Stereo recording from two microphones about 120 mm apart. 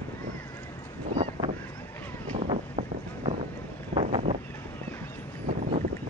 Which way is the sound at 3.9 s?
55° right (ahead or behind).